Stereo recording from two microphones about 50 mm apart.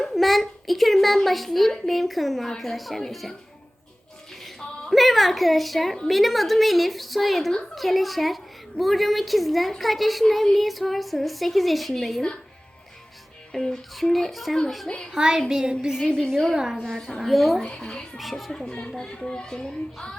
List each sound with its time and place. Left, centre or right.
0.0 s a child's voice: centre
4.4 s a woman's voice: centre
13.5 s a child's voice: centre
14.8 s a child's voice: centre
15.1 s speech: centre
16.0 s a child's voice: centre
17.2 s a child's voice: centre
17.6 s a child's voice: centre
18.2 s a child's voice: centre
18.5 s a child's voice: centre